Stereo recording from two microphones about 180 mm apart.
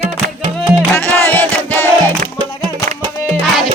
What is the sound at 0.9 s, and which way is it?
Music, 10° left (ahead or behind).